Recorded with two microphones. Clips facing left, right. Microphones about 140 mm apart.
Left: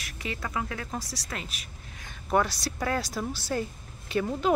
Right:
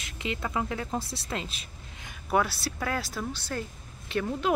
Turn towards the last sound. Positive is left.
turn(degrees=5)  # may be behind; listen again after turning